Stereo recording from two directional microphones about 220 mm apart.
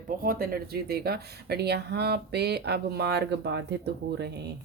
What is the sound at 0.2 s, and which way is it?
Speech, 40° right (ahead or behind).